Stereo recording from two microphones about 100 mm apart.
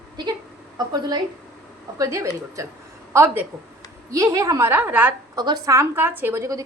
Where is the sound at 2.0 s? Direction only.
30° right (ahead or behind).